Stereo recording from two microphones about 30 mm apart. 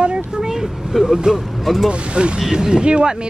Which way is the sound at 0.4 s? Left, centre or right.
Centre.